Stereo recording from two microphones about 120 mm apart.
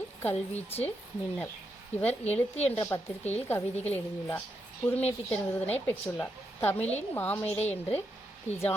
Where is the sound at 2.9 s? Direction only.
25° left (ahead or behind).